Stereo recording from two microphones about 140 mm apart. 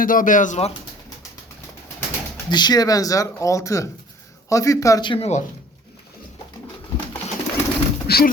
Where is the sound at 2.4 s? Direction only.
30° left (ahead or behind).